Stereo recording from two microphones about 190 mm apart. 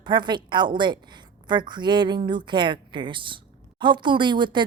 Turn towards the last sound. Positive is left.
turn(degrees=-25)  # may be behind; listen again after turning